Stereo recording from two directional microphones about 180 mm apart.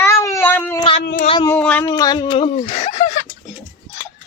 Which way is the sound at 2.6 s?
40° left (ahead or behind).